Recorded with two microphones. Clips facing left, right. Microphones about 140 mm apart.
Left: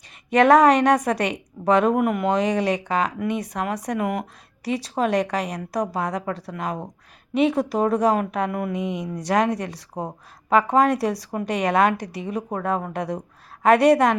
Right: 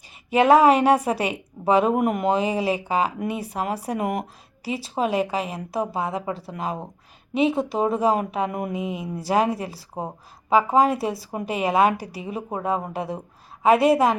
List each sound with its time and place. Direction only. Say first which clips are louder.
0.3 s a woman's voice: left 1 dB; 5° right (ahead or behind)
2.0 s speech: left 1 dB; 20° right (ahead or behind)
2.3 s speech: left 1 dB; 5° right (ahead or behind)
3.1 s speech: left 2 dB; 30° right (ahead or behind)
3.3 s speech: left 2 dB; 10° right (ahead or behind)
3.9 s speech: left 1 dB; 25° right (ahead or behind)
4.2 s a woman's voice: even; 5° right (ahead or behind)
6.4 s speech: even; 30° right (ahead or behind)
7.3 s a woman's voice: left 1 dB; 5° right (ahead or behind)
8.4 s speech: left 2 dB; 15° right (ahead or behind)
8.8 s a woman's voice: left 1 dB; 5° right (ahead or behind)